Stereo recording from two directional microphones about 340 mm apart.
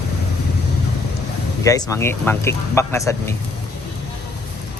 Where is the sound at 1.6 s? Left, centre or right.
Centre.